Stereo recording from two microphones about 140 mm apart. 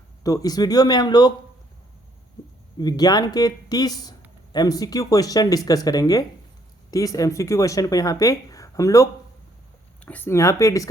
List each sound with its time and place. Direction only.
0.2 s speech: 25° left (ahead or behind)
2.7 s speech: 30° left (ahead or behind)
10.0 s speech: 10° left (ahead or behind)